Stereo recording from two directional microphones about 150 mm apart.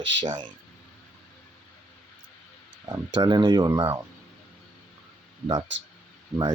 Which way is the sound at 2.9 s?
25° right (ahead or behind).